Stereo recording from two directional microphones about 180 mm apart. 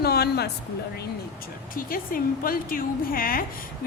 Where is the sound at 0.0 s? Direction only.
60° left (ahead or behind).